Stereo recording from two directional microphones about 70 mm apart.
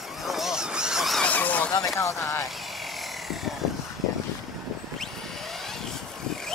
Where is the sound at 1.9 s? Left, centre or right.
Left.